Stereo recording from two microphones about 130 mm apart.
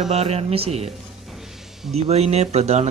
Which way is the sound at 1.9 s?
55° right (ahead or behind).